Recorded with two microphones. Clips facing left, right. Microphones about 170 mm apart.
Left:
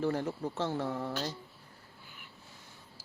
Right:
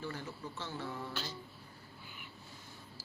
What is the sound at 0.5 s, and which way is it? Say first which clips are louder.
Mantra: left 8 dB; 80° left.